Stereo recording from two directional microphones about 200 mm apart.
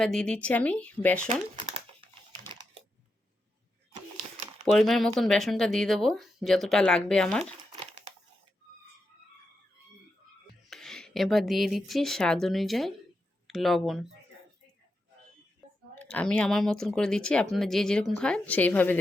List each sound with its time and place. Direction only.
0.0 s speech: 5° left (ahead or behind)
4.6 s speech: centre (ahead or behind)
7.8 s crumpling: 35° right (ahead or behind)
10.7 s speech: centre (ahead or behind)
16.0 s speech: 5° left (ahead or behind)